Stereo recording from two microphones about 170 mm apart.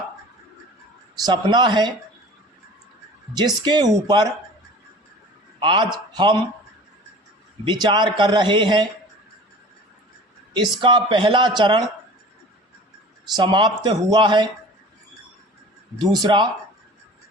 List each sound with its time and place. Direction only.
1.2 s a man's voice: 25° right (ahead or behind)
3.3 s a man's voice: 25° right (ahead or behind)
5.5 s a man's voice: 30° right (ahead or behind)
7.6 s a man's voice: 25° right (ahead or behind)
10.5 s a man's voice: 30° right (ahead or behind)
13.3 s a man's voice: 25° right (ahead or behind)
16.1 s a man's voice: 25° right (ahead or behind)